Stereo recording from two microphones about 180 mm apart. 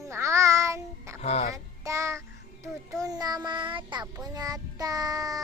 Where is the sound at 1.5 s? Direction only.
15° right (ahead or behind).